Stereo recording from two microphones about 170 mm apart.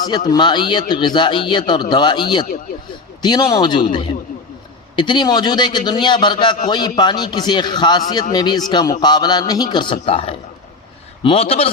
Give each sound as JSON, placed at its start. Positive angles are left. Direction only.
{"t": 0.3, "sound": "a man's voice", "side_deg": 25}